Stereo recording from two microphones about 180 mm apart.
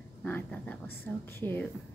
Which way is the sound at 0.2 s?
10° left (ahead or behind).